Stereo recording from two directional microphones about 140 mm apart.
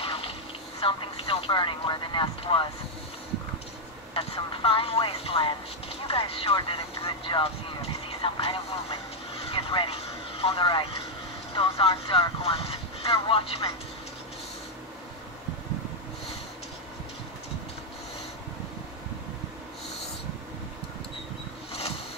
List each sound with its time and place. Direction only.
0.0 s a sound: 45° left (ahead or behind)
0.7 s speech: 45° left (ahead or behind)
4.1 s speech: 40° left (ahead or behind)
9.5 s vehicle: 40° left (ahead or behind)
11.5 s speech: 40° left (ahead or behind)